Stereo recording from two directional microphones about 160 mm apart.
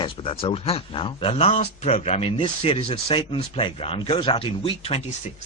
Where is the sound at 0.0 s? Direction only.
30° left (ahead or behind).